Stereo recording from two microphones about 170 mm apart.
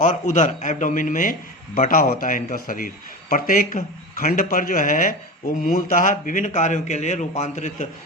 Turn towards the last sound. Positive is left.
turn(degrees=45)  # may be behind; listen again after turning